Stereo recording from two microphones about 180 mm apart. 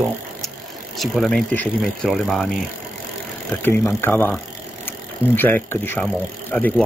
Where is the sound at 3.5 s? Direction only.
10° left (ahead or behind).